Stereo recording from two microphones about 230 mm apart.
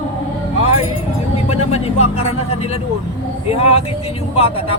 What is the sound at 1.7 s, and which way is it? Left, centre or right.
Speech, left.